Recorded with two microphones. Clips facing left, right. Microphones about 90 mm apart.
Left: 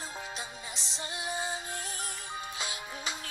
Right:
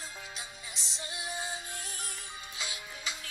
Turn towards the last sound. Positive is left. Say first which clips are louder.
# left 3 dB
turn(degrees=40)  # may be behind; listen again after turning